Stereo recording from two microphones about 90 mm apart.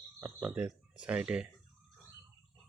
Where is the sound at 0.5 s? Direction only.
15° right (ahead or behind).